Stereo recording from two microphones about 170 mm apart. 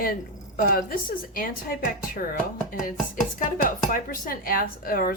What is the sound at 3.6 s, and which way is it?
A woman's voice, 55° left (ahead or behind).